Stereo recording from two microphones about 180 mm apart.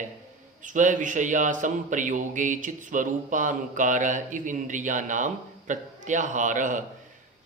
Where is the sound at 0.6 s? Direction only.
45° right (ahead or behind).